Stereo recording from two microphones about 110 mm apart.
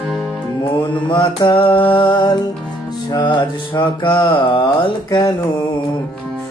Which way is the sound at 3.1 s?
40° left (ahead or behind).